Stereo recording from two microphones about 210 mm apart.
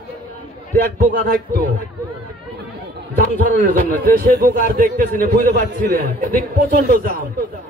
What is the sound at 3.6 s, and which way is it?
A man's voice, 45° right (ahead or behind).